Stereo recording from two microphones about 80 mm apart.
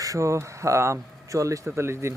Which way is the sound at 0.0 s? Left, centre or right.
Right.